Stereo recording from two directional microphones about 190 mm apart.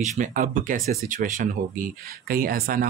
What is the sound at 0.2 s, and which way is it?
Speech, 45° right (ahead or behind).